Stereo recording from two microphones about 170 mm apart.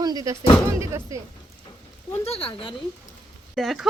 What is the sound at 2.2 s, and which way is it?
Speech, 35° left (ahead or behind).